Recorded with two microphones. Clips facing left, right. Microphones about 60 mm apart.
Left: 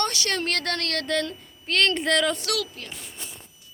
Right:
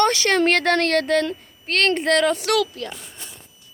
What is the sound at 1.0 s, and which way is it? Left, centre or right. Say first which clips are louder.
A woman's voice: right 7 dB; centre.